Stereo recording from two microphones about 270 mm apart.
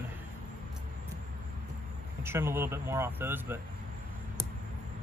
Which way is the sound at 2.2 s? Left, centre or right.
Centre.